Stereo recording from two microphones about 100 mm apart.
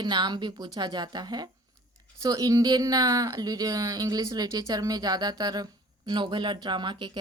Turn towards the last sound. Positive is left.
turn(degrees=-50)  # may be behind; listen again after turning